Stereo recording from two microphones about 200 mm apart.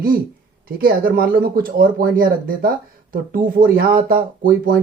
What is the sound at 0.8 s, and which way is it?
Speech, 50° right (ahead or behind).